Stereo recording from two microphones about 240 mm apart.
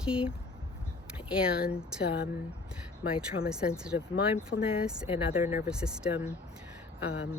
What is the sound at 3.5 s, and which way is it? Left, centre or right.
Speech, centre.